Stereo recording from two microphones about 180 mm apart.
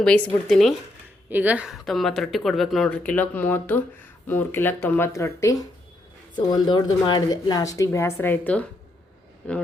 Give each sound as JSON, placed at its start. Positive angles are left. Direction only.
{"t": 0.0, "sound": "speech", "side_deg": 5}
{"t": 1.3, "sound": "speech", "side_deg": -10}